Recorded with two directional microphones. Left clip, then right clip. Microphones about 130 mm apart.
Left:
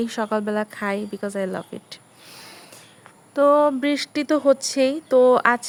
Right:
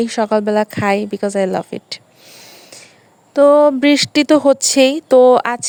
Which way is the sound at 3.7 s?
70° right (ahead or behind).